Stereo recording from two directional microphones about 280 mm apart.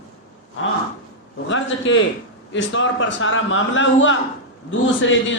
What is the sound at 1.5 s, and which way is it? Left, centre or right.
Speech, left.